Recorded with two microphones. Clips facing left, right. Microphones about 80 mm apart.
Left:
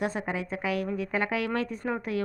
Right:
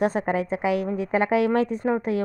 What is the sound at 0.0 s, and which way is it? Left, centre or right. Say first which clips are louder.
Speech: right 8 dB; right.